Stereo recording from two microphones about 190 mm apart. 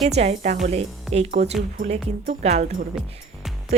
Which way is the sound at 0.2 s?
35° right (ahead or behind).